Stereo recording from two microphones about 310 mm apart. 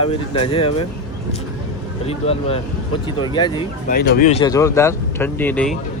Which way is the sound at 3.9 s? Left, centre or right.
Left.